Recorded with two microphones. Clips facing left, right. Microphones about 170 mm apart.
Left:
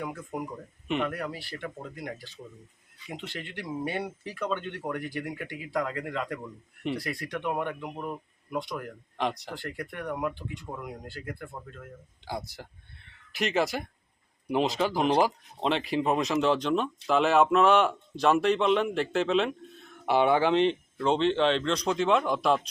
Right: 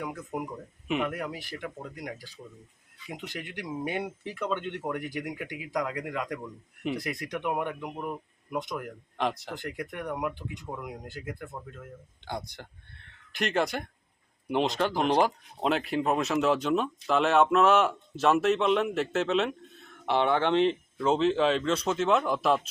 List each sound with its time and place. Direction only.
0.0 s speech: centre (ahead or behind)
1.1 s speech: 15° right (ahead or behind)
2.4 s speech: 5° left (ahead or behind)
3.1 s speech: 15° right (ahead or behind)
6.4 s speech: centre (ahead or behind)
7.0 s speech: 20° right (ahead or behind)
9.1 s speech: centre (ahead or behind)
9.6 s speech: 15° right (ahead or behind)
10.1 s speech: centre (ahead or behind)
10.3 s speech: 15° right (ahead or behind)